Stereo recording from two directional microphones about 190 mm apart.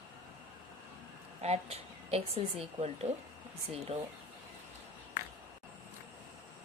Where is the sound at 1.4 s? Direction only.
35° right (ahead or behind).